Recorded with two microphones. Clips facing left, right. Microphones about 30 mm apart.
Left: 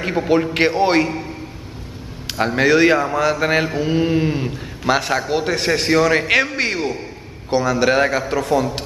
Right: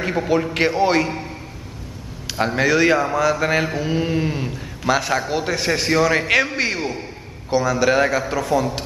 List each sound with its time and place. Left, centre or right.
0.0 s a man's voice: centre
0.4 s a man's voice: centre
1.0 s a man's voice: centre
2.2 s a man's voice: centre